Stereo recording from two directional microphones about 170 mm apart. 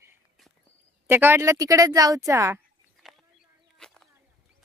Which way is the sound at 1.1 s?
15° right (ahead or behind).